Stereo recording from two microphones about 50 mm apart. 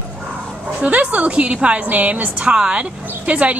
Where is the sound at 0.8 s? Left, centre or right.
Right.